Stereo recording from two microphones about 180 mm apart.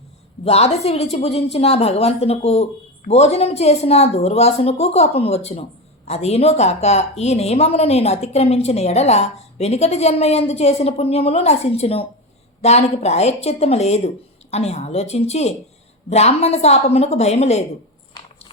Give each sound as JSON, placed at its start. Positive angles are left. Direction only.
{"t": 0.4, "sound": "a woman's voice", "side_deg": 35}